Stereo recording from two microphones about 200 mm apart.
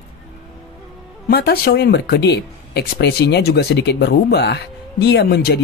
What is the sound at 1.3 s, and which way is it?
Speech, 50° left (ahead or behind).